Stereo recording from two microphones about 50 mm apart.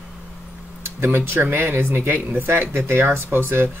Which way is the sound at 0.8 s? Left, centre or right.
Right.